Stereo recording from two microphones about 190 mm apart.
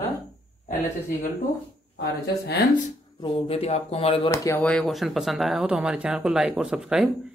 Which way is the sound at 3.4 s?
30° left (ahead or behind).